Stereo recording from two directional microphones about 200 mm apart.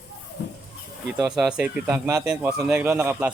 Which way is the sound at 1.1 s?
5° right (ahead or behind).